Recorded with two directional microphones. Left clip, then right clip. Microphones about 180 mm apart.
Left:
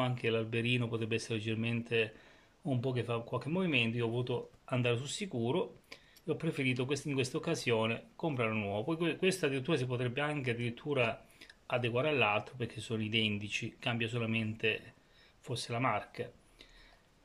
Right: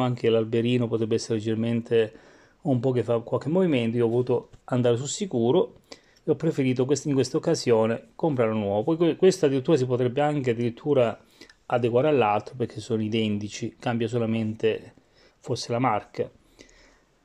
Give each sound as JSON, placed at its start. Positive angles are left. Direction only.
{"t": 0.0, "sound": "speech", "side_deg": -35}